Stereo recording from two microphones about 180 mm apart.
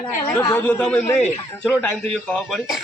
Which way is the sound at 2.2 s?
Centre (ahead or behind).